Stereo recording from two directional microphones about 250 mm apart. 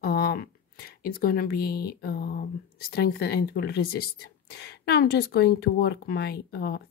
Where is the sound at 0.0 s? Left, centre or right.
Left.